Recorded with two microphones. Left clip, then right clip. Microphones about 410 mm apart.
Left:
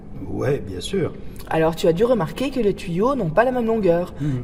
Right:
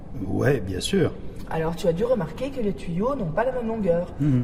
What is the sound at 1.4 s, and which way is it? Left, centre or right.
Speech, left.